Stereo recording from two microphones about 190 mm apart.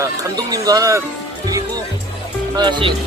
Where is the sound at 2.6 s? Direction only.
25° right (ahead or behind).